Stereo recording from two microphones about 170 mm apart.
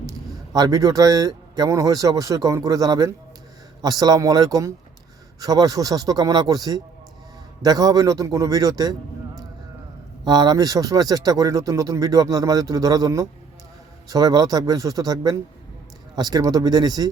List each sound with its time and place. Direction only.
0.1 s a man's voice: 20° right (ahead or behind)